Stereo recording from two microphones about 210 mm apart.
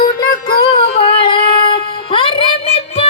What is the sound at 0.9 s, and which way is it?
Music, 25° left (ahead or behind).